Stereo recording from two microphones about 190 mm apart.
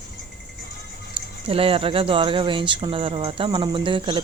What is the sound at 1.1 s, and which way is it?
Speech, 30° right (ahead or behind).